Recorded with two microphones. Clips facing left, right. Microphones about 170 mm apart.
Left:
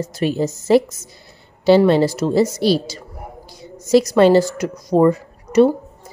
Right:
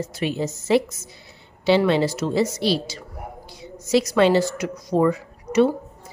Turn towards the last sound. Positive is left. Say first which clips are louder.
# left 5 dB
turn(degrees=40)  # may be behind; listen again after turning